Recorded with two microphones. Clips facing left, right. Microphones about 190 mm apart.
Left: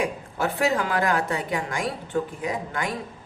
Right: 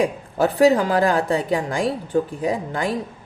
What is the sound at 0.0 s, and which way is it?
A woman's voice, 35° right (ahead or behind).